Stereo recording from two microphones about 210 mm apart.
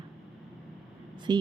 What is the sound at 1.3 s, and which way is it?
Speech, 20° right (ahead or behind).